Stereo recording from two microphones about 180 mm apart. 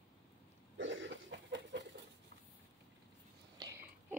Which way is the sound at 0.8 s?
85° right.